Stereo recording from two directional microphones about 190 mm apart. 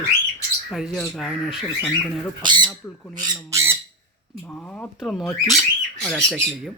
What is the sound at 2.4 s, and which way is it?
Speech, 25° right (ahead or behind).